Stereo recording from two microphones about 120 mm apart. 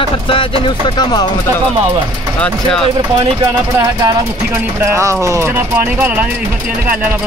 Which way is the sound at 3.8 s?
30° right (ahead or behind).